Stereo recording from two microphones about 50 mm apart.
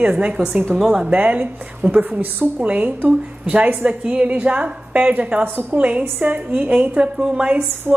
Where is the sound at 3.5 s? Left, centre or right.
Right.